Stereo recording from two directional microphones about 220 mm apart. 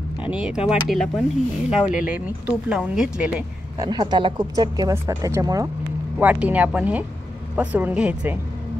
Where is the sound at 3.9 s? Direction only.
20° right (ahead or behind).